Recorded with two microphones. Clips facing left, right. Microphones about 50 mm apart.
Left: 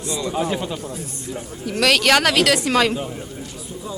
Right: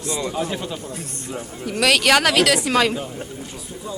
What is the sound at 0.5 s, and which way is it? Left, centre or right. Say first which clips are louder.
Speech: left 3 dB; centre.